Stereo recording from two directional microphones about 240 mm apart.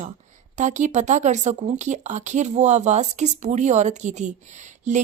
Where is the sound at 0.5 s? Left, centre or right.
Right.